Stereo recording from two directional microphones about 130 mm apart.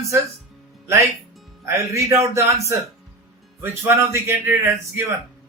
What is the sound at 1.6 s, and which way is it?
A man's voice, 25° right (ahead or behind).